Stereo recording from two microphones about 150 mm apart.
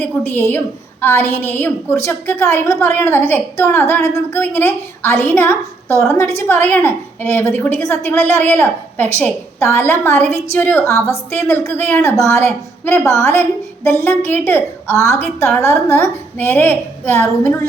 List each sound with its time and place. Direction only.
0.0 s a woman's voice: 10° left (ahead or behind)